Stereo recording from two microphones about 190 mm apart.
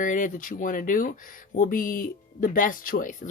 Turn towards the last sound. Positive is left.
turn(degrees=45)  # may be behind; listen again after turning